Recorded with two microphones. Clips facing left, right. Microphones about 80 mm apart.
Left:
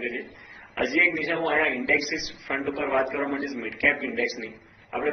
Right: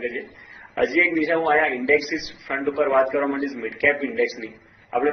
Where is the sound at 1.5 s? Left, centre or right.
Centre.